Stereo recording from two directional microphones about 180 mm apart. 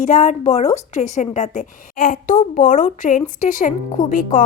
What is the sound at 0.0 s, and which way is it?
A woman's voice, 45° left (ahead or behind).